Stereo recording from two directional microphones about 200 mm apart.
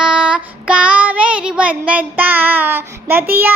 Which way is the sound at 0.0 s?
5° right (ahead or behind).